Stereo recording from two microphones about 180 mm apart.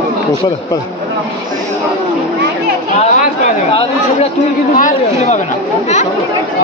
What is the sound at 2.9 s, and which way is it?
Chatter, 40° left (ahead or behind).